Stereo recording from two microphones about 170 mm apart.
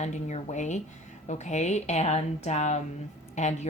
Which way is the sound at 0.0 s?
40° left (ahead or behind).